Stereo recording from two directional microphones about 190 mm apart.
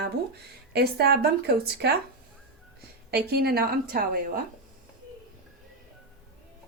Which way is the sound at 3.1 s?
55° right (ahead or behind).